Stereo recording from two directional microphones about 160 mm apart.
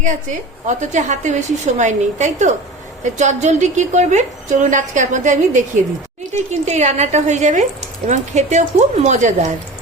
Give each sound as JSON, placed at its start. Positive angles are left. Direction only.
{"t": 0.7, "sound": "a woman's voice", "side_deg": -50}